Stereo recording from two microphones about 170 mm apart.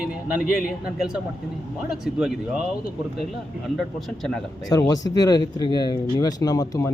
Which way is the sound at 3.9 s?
Centre (ahead or behind).